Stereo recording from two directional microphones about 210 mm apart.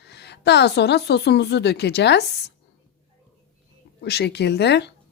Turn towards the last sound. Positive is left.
turn(degrees=55)  # may be behind; listen again after turning